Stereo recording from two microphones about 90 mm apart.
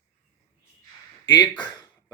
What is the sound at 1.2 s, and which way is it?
Speech, 50° left (ahead or behind).